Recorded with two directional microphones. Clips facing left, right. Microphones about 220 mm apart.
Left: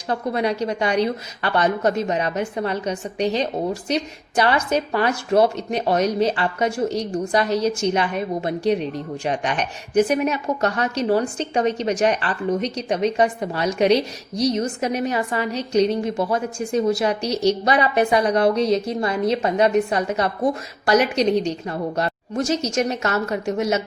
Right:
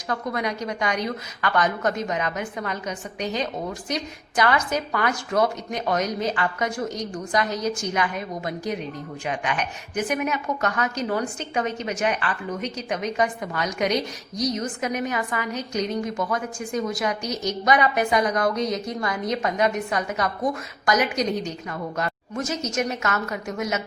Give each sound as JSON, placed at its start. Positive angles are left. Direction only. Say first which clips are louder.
{"t": 0.1, "sound": "a woman's voice", "louder": "left 5 dB", "side_deg": 30}